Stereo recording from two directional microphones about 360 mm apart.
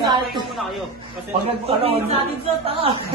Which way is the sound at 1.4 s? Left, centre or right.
Centre.